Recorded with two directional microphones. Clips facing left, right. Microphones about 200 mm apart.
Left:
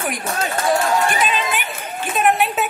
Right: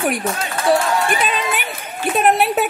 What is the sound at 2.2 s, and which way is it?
Speech, 35° right (ahead or behind).